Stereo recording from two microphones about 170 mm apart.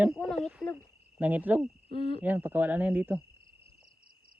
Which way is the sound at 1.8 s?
30° left (ahead or behind).